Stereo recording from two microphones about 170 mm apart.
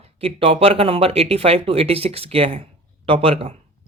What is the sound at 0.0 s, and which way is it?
Speech, 35° right (ahead or behind).